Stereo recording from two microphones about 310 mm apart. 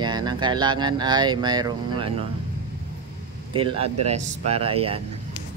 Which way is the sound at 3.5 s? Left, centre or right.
Centre.